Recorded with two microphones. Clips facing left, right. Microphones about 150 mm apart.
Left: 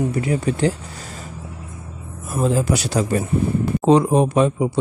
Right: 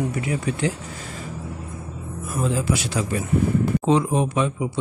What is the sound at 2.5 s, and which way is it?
Speech, 40° left (ahead or behind).